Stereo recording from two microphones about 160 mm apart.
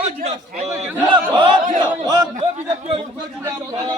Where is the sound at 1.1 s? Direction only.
30° right (ahead or behind).